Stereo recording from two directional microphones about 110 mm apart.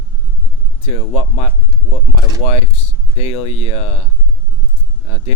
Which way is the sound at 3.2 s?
70° left (ahead or behind).